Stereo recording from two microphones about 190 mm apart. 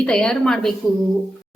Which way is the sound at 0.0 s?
5° left (ahead or behind).